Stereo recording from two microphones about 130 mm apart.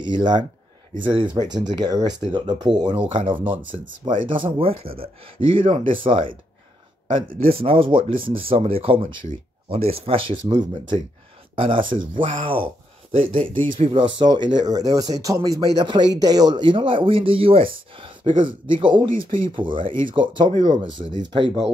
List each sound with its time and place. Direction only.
0.0 s speech: 35° right (ahead or behind)
7.4 s speech: 45° right (ahead or behind)
12.1 s speech: 90° right
12.4 s speech: 45° right (ahead or behind)